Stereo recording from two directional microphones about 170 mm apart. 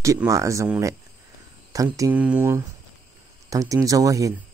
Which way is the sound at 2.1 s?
10° right (ahead or behind).